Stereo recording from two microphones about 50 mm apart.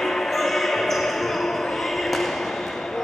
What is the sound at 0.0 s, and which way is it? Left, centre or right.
Basketball bounce, centre.